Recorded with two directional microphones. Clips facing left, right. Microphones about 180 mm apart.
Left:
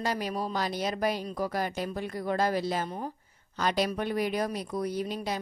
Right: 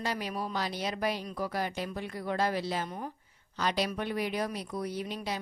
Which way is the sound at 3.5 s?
50° left (ahead or behind).